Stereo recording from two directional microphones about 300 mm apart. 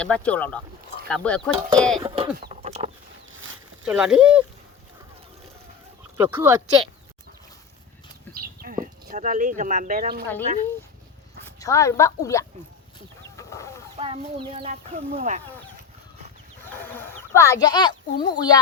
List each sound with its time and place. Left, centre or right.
0.0 s speech: centre
2.0 s a sound: centre
3.8 s speech: centre
6.1 s speech: centre
8.3 s a sound: right
11.4 s speech: centre
13.3 s chicken: centre
13.9 s speech: centre
16.6 s speech: centre